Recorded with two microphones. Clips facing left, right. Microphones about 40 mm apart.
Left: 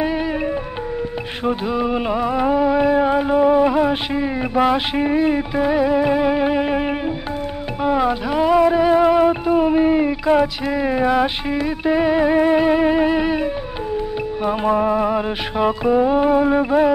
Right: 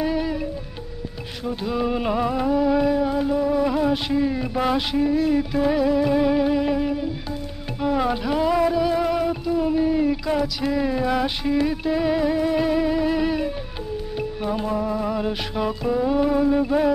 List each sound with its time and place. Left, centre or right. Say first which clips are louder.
1.7 s mantra: right 1 dB; centre
2.4 s music: left 4 dB; left
3.6 s a sound: left 4 dB; left
4.9 s music: left 2 dB; left
5.5 s music: left 3 dB; left
7.8 s music: left 4 dB; left
11.1 s mantra: left 4 dB; left
11.8 s music: left 5 dB; left
13.2 s music: left 3 dB; left
14.7 s music: left 11 dB; left
15.0 s music: left 4 dB; left